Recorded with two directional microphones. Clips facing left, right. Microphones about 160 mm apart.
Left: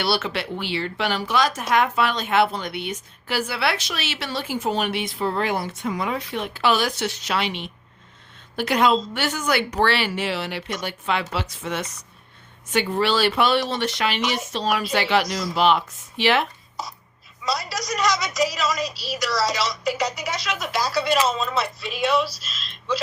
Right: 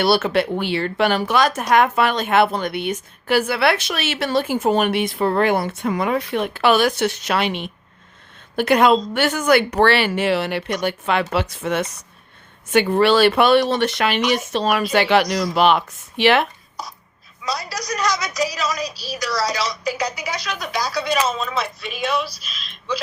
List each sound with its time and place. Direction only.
0.0 s a woman's voice: 50° right (ahead or behind)
16.8 s a woman's voice: centre (ahead or behind)